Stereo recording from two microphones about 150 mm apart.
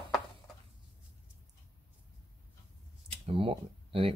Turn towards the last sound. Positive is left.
turn(degrees=-40)  # may be behind; listen again after turning